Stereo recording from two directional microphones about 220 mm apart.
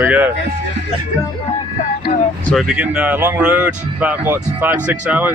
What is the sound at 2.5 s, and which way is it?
Speech, centre (ahead or behind).